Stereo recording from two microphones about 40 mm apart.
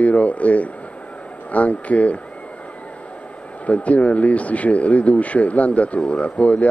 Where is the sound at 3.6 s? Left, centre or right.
Left.